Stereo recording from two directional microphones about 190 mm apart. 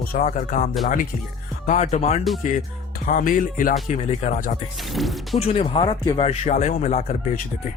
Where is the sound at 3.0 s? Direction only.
45° left (ahead or behind).